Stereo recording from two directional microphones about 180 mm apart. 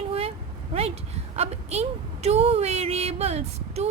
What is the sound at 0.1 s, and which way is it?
Vehicle, 35° right (ahead or behind).